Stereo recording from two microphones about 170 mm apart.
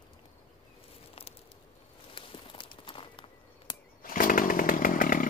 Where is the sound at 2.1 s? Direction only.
30° left (ahead or behind).